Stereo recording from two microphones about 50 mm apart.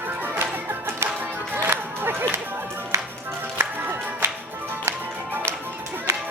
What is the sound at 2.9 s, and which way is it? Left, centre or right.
Music, right.